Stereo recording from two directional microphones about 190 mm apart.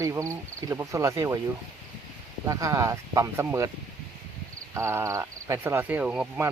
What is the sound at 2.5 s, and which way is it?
Speech, 15° right (ahead or behind).